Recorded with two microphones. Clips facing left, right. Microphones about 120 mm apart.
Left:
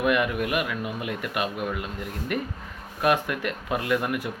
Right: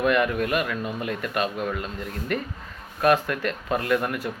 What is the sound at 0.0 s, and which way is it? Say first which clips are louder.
Speech: right 2 dB; 15° left (ahead or behind).